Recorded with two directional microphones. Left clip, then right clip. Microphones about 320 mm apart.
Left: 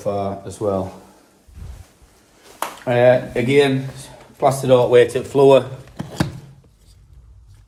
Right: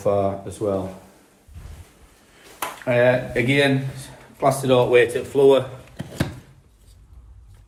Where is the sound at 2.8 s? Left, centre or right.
Centre.